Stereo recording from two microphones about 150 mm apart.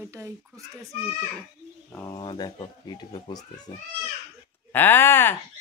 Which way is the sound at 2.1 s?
30° left (ahead or behind).